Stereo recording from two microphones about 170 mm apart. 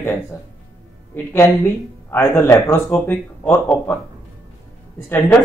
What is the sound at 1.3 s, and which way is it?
Speech, 15° left (ahead or behind).